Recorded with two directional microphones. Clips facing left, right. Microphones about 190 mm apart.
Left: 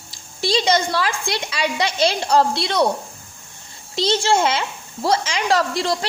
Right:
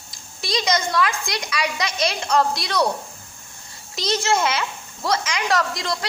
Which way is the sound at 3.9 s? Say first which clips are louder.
Left 3 dB; 30° left (ahead or behind).